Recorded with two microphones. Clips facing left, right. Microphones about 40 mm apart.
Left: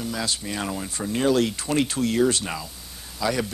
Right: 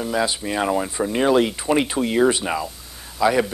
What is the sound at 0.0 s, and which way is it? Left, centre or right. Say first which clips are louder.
Speech: right 6 dB; right.